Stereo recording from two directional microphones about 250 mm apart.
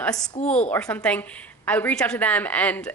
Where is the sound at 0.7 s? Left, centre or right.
Centre.